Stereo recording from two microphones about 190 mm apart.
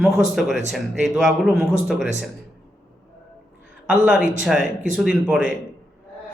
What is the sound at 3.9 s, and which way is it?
Speech, centre (ahead or behind).